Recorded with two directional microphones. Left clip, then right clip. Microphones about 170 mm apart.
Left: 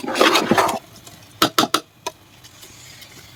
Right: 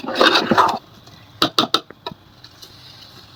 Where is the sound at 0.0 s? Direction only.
20° left (ahead or behind).